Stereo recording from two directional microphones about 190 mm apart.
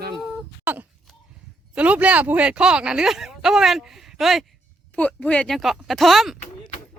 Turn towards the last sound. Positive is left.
turn(degrees=0)  # may be behind; listen again after turning